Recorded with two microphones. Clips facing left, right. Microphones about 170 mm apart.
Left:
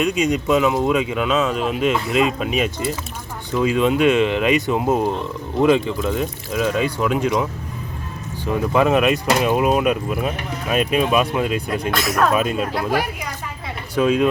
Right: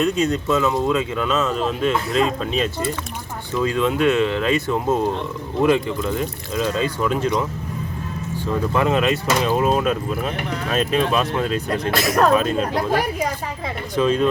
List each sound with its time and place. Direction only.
0.0 s speech: 15° left (ahead or behind)
8.4 s speech: 15° left (ahead or behind)
13.9 s speech: 10° left (ahead or behind)